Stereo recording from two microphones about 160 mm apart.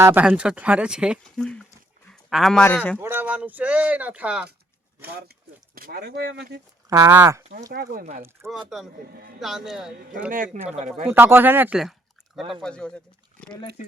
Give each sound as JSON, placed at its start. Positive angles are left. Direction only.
{"t": 0.0, "sound": "speech", "side_deg": -15}
{"t": 2.0, "sound": "a sound", "side_deg": 0}
{"t": 2.6, "sound": "speech", "side_deg": 10}
{"t": 3.0, "sound": "speech", "side_deg": -15}
{"t": 5.0, "sound": "speech", "side_deg": -80}
{"t": 5.7, "sound": "speech", "side_deg": -65}
{"t": 6.9, "sound": "speech", "side_deg": -15}
{"t": 7.7, "sound": "speech", "side_deg": -65}
{"t": 8.4, "sound": "speech", "side_deg": -15}
{"t": 9.4, "sound": "speech", "side_deg": 0}
{"t": 10.3, "sound": "speech", "side_deg": -60}
{"t": 11.1, "sound": "speech", "side_deg": -15}
{"t": 12.6, "sound": "speech", "side_deg": 5}